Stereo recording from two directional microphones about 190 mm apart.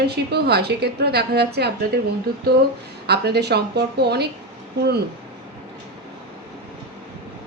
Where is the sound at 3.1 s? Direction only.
60° right (ahead or behind).